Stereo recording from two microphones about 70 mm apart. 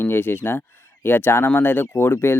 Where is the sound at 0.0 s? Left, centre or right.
Left.